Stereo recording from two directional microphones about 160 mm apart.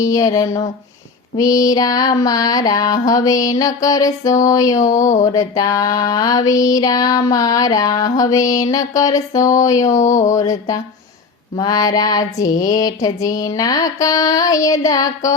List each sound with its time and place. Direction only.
0.0 s female singing: 20° left (ahead or behind)
9.8 s a sound: 50° left (ahead or behind)
10.3 s female singing: 20° left (ahead or behind)